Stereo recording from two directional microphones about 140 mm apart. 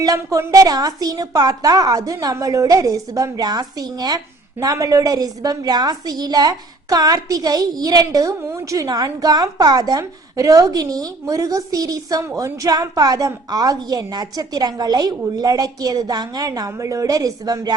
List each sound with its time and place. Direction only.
0.0 s a woman's voice: 25° right (ahead or behind)